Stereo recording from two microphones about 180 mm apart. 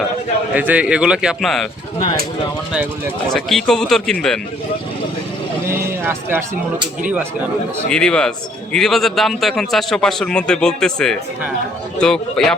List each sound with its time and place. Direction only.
0.5 s a man's voice: 10° right (ahead or behind)
3.3 s a man's voice: centre (ahead or behind)
5.6 s speech: 15° right (ahead or behind)
7.9 s a man's voice: 5° left (ahead or behind)